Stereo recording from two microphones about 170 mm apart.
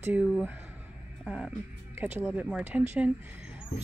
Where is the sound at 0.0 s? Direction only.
10° right (ahead or behind).